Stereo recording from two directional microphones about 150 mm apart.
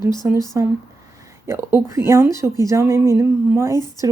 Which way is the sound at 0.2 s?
15° right (ahead or behind).